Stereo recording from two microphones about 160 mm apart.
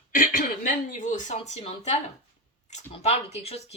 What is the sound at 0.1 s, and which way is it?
Speech, 60° left (ahead or behind).